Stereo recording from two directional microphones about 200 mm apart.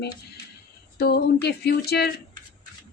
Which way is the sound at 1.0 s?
55° left (ahead or behind).